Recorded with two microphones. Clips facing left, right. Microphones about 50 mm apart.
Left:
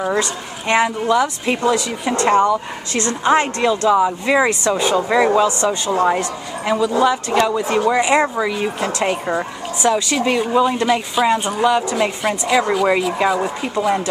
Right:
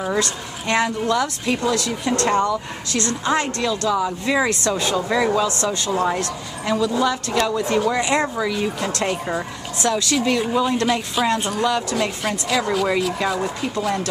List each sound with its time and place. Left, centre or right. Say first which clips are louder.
0.0 s speech: left 3 dB; centre
2.9 s speech: left 5 dB; left